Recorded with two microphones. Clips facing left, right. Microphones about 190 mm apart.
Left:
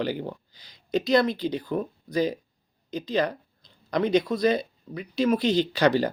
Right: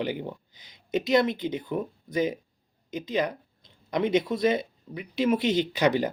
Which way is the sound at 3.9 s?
20° right (ahead or behind).